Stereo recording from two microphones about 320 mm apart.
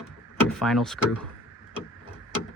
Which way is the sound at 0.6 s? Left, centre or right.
Centre.